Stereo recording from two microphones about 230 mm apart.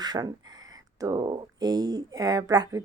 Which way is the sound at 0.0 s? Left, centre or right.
Centre.